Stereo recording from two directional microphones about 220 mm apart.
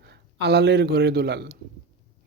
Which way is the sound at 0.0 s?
50° right (ahead or behind).